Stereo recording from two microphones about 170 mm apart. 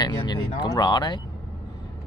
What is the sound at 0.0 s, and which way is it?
Speech, 25° left (ahead or behind).